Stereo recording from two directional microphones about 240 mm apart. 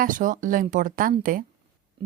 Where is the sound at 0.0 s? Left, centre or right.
Right.